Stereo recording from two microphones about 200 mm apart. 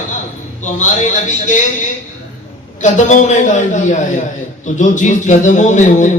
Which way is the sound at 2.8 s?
35° left (ahead or behind).